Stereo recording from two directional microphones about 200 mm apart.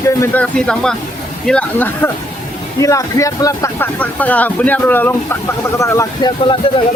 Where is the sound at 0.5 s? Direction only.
5° left (ahead or behind).